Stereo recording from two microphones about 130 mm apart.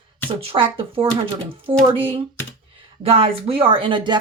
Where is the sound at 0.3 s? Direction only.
45° right (ahead or behind).